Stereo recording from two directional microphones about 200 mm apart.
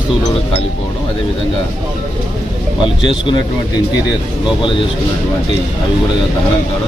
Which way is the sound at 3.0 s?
25° left (ahead or behind).